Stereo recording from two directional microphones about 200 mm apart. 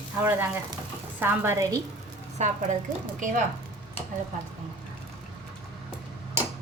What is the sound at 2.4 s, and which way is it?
Speech, 35° right (ahead or behind).